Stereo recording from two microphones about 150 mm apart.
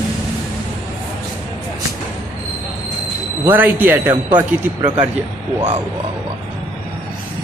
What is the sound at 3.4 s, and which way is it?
Speech, 15° right (ahead or behind).